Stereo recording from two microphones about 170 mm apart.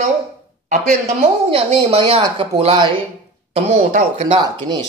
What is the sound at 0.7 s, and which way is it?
Speech, 40° right (ahead or behind).